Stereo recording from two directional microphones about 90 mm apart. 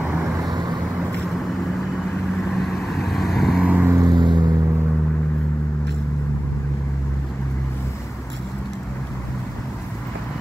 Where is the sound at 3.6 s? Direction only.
15° right (ahead or behind).